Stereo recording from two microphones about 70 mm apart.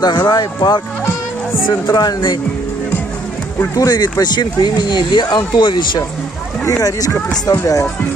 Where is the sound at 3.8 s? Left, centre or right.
Left.